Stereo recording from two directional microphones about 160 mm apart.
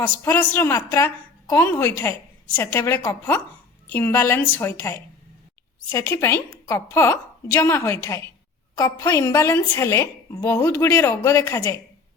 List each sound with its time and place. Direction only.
0.0 s a woman's voice: 10° left (ahead or behind)